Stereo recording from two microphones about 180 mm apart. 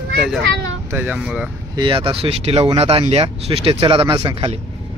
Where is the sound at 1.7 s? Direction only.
25° right (ahead or behind).